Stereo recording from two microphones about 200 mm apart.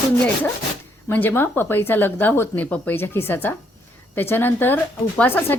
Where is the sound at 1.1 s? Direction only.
10° left (ahead or behind).